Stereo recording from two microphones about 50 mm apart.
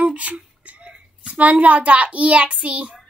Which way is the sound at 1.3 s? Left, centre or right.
Right.